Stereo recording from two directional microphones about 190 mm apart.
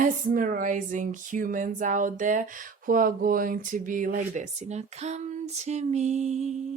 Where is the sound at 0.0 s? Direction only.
45° right (ahead or behind).